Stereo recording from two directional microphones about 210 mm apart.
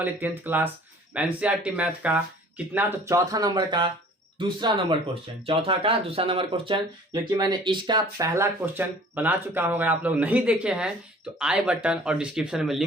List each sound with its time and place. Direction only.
0.0 s speech: 10° right (ahead or behind)